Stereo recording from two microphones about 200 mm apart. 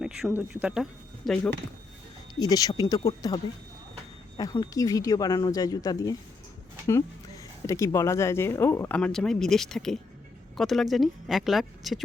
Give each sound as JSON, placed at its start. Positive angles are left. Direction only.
{"t": 0.3, "sound": "speech", "side_deg": -5}
{"t": 2.4, "sound": "speech", "side_deg": 20}
{"t": 7.7, "sound": "speech", "side_deg": 15}